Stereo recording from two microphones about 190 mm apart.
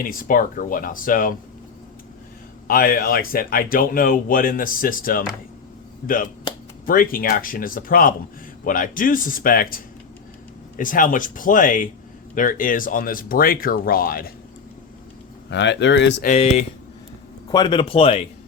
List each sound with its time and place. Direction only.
0.0 s speech: 50° left (ahead or behind)
2.6 s speech: 50° left (ahead or behind)
6.8 s speech: 50° left (ahead or behind)
15.4 s speech: 65° left (ahead or behind)
16.2 s speech: 35° left (ahead or behind)
17.5 s speech: 25° left (ahead or behind)